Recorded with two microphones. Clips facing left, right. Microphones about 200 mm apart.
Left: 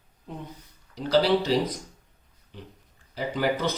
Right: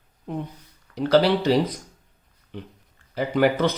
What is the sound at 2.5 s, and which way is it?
Speech, 65° right (ahead or behind).